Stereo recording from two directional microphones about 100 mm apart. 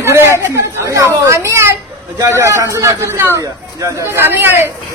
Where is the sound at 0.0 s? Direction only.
25° right (ahead or behind).